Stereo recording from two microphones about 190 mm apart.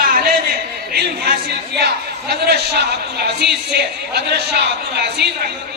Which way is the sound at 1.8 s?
60° right (ahead or behind).